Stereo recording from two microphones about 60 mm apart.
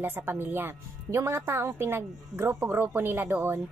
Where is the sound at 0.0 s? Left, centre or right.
Right.